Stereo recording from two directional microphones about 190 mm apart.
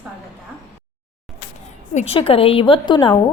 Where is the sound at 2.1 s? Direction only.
30° left (ahead or behind).